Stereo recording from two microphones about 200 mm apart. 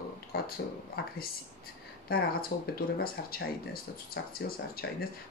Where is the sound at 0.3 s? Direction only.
50° left (ahead or behind).